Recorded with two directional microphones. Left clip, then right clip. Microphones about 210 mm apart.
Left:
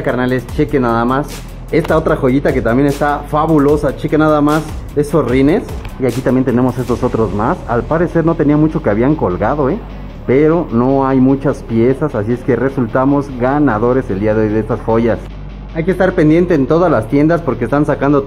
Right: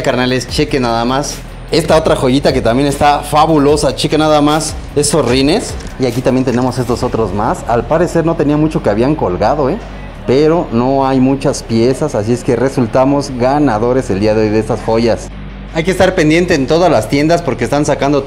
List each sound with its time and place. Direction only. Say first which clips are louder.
0.0 s speech: right 2 dB; 20° right (ahead or behind)
6.2 s speech: right 1 dB; 10° right (ahead or behind)
10.7 s speech: right 1 dB; 5° left (ahead or behind)